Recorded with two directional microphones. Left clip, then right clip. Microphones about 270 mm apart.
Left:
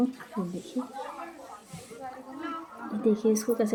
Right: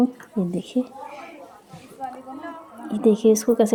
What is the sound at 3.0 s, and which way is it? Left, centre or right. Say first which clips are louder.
Speech: right 8 dB; right.